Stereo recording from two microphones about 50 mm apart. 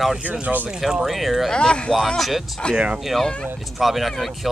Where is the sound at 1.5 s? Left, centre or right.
Centre.